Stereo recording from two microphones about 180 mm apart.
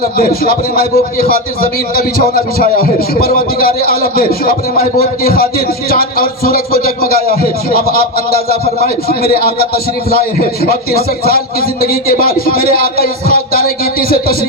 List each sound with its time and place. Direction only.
0.2 s a man's voice: 55° left (ahead or behind)